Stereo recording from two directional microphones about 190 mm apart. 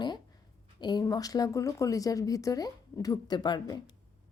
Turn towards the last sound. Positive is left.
turn(degrees=20)  # may be behind; listen again after turning